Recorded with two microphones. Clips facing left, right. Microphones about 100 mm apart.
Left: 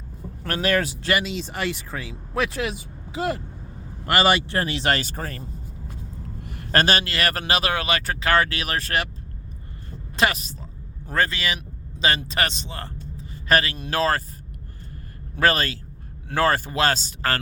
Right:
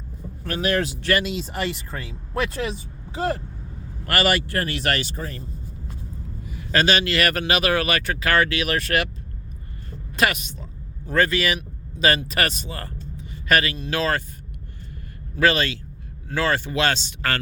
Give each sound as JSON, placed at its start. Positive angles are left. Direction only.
{"t": 1.2, "sound": "speech", "side_deg": 0}
{"t": 4.0, "sound": "speech", "side_deg": 25}
{"t": 5.1, "sound": "speech", "side_deg": 60}
{"t": 6.4, "sound": "a sound", "side_deg": 65}
{"t": 6.7, "sound": "speech", "side_deg": 45}
{"t": 10.2, "sound": "speech", "side_deg": 30}
{"t": 13.7, "sound": "speech", "side_deg": 45}
{"t": 15.4, "sound": "speech", "side_deg": 40}